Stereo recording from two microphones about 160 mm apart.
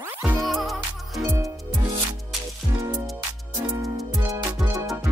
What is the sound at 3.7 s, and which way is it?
Music, 20° right (ahead or behind).